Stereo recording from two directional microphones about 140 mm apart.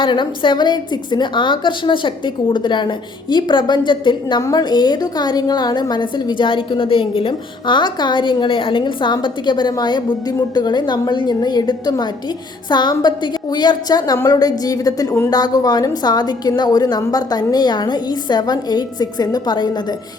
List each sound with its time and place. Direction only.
0.0 s a woman's voice: 35° left (ahead or behind)